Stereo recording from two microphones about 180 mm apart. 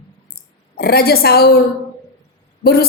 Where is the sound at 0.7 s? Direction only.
60° left (ahead or behind).